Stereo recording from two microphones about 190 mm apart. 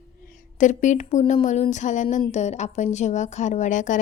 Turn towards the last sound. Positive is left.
turn(degrees=40)  # may be behind; listen again after turning